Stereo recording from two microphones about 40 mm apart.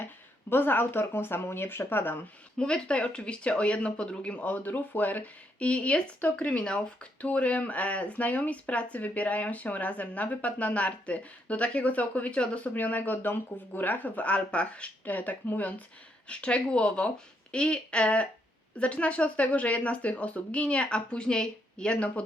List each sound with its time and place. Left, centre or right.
0.5 s speech: left
2.6 s speech: left
4.4 s speech: left
12.7 s speech: left
16.3 s speech: left